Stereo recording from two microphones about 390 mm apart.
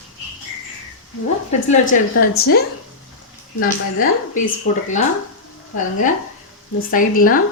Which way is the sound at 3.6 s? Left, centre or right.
Left.